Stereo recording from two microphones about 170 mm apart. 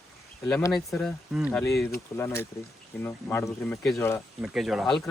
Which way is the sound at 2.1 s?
15° left (ahead or behind).